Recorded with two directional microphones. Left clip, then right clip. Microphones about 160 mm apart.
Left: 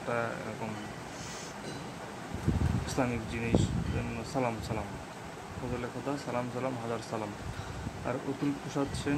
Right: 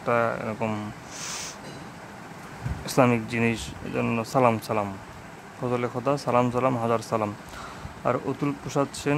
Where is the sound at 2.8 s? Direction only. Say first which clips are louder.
Right 13 dB; 70° right (ahead or behind).